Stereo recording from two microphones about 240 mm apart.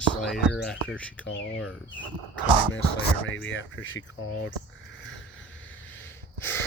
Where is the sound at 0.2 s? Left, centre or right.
Centre.